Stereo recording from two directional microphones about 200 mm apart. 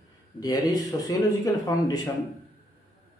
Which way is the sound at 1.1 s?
15° left (ahead or behind).